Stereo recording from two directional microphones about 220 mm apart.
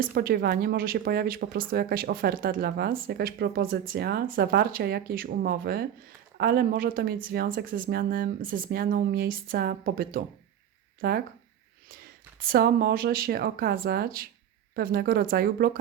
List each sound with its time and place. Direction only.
0.0 s speech: 45° right (ahead or behind)
12.4 s speech: 40° right (ahead or behind)